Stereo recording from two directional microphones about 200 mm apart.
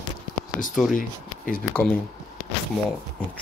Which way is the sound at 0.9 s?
45° left (ahead or behind).